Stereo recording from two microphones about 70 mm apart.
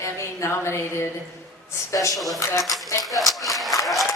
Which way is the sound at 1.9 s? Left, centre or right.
Left.